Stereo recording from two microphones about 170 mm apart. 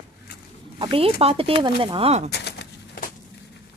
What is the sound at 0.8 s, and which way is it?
Speech, 30° right (ahead or behind).